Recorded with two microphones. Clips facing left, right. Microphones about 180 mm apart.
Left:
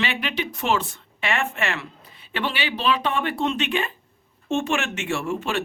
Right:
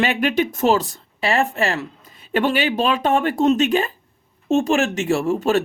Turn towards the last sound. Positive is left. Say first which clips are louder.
# right 7 dB
turn(degrees=-40)  # may be behind; listen again after turning